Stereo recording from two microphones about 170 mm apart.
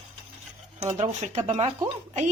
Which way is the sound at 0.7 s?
40° right (ahead or behind).